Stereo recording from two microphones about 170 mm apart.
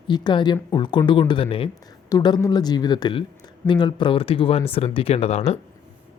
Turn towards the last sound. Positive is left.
turn(degrees=40)  # may be behind; listen again after turning